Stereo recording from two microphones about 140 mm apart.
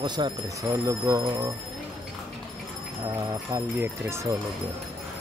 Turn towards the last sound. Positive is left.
turn(degrees=-20)  # may be behind; listen again after turning